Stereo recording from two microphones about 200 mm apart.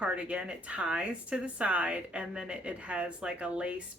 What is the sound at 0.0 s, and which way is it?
Speech, 5° right (ahead or behind).